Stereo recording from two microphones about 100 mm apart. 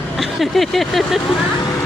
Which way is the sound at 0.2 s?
Centre (ahead or behind).